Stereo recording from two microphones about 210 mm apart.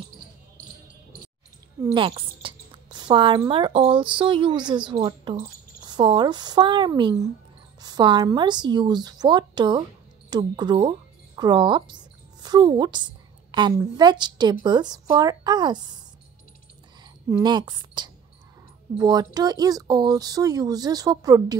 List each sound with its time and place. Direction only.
1.8 s speech: 15° right (ahead or behind)
2.0 s speech: 25° right (ahead or behind)
17.0 s speech: 20° right (ahead or behind)